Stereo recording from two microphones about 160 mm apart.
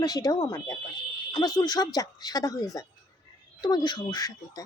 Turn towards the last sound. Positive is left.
turn(degrees=25)  # may be behind; listen again after turning